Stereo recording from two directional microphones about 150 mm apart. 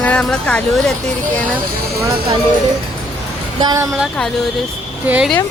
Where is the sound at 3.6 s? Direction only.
25° right (ahead or behind).